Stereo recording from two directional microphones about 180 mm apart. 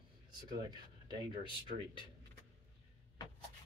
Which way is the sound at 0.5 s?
25° right (ahead or behind).